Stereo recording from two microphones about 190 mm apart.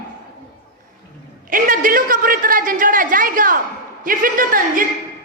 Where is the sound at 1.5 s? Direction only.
45° right (ahead or behind).